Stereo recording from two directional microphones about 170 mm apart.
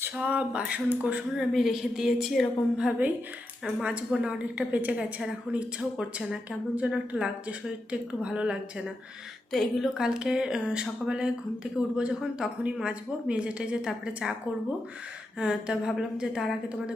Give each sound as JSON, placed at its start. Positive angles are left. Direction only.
{"t": 0.0, "sound": "a woman's voice", "side_deg": -5}